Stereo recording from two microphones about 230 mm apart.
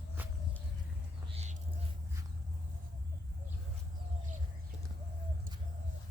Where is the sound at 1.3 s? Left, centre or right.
Right.